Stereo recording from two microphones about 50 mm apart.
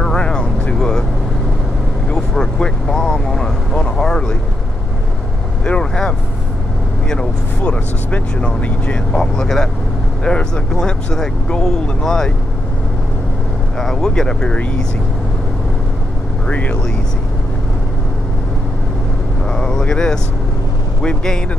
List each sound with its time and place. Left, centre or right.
0.0 s vehicle: centre
0.7 s vehicle: centre
2.0 s speech: centre
5.7 s speech: centre
9.2 s speech: centre
13.7 s speech: centre
16.4 s speech: left
19.5 s vehicle: centre
21.0 s speech: centre